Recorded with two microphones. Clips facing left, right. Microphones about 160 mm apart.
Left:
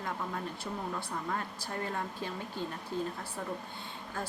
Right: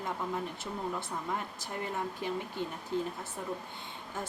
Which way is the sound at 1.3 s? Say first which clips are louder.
Even; 15° right (ahead or behind).